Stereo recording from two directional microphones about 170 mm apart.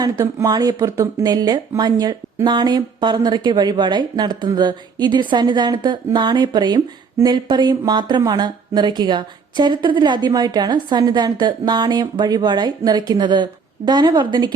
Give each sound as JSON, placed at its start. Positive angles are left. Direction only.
{"t": 0.0, "sound": "speech", "side_deg": -20}